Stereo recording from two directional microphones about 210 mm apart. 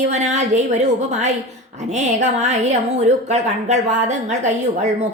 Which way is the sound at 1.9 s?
35° right (ahead or behind).